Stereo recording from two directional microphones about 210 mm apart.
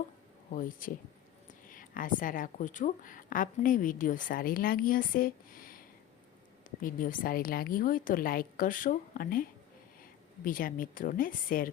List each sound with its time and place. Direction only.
0.5 s a woman's voice: 40° left (ahead or behind)